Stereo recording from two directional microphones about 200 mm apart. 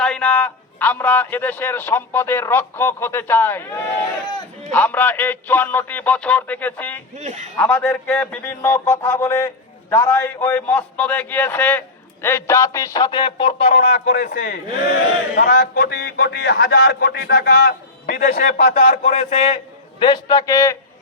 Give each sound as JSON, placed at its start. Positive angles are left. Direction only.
{"t": 0.0, "sound": "a man's voice", "side_deg": 5}
{"t": 4.7, "sound": "a man's voice", "side_deg": 10}
{"t": 7.2, "sound": "a man's voice", "side_deg": -35}
{"t": 7.5, "sound": "a man's voice", "side_deg": 5}
{"t": 13.9, "sound": "a man's voice", "side_deg": 45}
{"t": 20.0, "sound": "a man's voice", "side_deg": 20}